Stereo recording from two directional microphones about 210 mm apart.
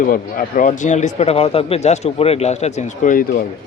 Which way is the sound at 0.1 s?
40° left (ahead or behind).